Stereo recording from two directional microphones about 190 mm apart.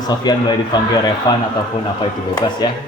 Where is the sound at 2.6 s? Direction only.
20° left (ahead or behind).